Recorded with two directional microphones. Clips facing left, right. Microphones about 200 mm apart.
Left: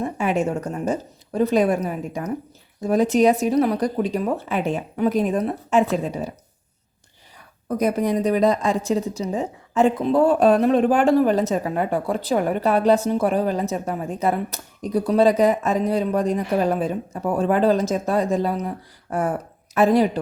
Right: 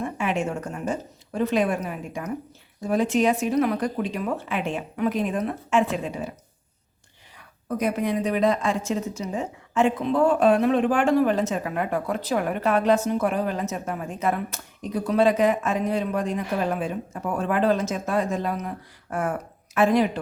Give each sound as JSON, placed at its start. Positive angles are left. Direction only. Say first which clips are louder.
{"t": 0.0, "sound": "a woman's voice", "louder": "left 4 dB", "side_deg": 40}
{"t": 7.8, "sound": "a woman's voice", "louder": "left 4 dB", "side_deg": 40}